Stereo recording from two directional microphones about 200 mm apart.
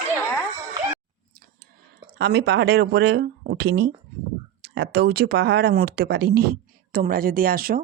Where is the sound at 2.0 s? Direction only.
55° right (ahead or behind).